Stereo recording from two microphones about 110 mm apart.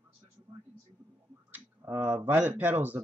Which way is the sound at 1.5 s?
20° right (ahead or behind).